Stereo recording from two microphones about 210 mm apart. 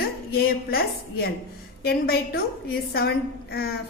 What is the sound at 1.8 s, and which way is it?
A woman's voice, 45° left (ahead or behind).